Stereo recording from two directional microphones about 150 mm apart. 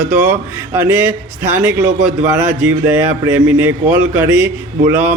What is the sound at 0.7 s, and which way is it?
Speech, 20° right (ahead or behind).